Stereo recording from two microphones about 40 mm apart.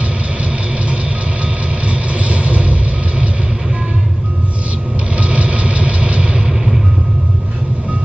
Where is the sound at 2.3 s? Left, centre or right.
Right.